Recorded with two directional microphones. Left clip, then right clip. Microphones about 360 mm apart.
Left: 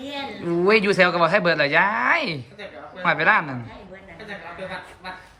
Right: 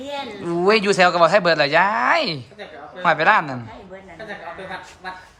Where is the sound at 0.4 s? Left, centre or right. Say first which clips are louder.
Right 1 dB; centre.